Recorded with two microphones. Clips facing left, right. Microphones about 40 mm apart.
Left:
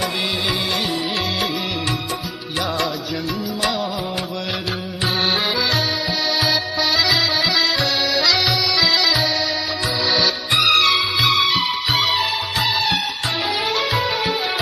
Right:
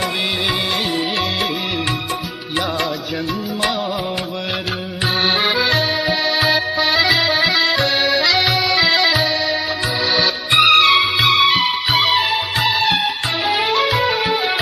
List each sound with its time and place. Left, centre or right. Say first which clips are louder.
6.4 s music: right 3 dB; centre
7.5 s accordion: right 3 dB; centre
8.7 s music: right 3 dB; right
10.5 s music: right 5 dB; right
10.9 s music: right 3 dB; centre
13.8 s music: right 3 dB; centre